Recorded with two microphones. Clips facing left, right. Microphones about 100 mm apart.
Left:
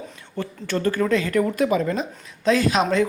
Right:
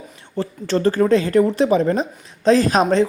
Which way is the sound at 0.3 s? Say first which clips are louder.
Right 5 dB; 30° right (ahead or behind).